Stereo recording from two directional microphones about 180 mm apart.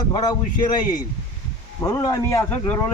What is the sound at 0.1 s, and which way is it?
A man's voice, 25° left (ahead or behind).